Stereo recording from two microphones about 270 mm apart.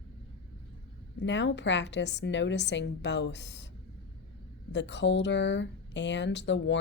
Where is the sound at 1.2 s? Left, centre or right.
Left.